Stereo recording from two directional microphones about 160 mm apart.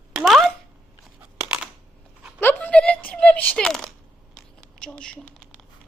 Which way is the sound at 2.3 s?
10° left (ahead or behind).